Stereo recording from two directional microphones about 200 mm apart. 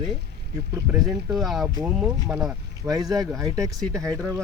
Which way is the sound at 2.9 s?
20° right (ahead or behind).